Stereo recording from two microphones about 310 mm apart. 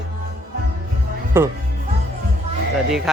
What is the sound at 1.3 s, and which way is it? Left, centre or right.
Speech, centre.